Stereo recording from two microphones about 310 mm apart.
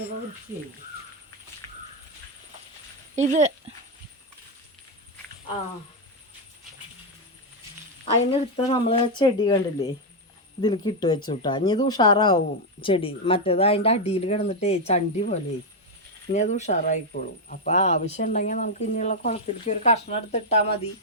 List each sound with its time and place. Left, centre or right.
3.2 s speech: right
8.0 s speech: centre